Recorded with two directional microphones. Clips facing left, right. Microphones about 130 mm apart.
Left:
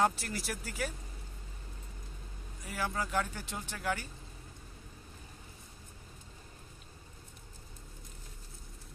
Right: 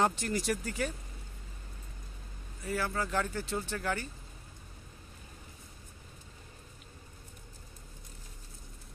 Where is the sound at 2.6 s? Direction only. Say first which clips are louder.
Right 3 dB; 10° left (ahead or behind).